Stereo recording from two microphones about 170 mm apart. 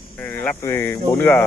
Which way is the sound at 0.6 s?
15° left (ahead or behind).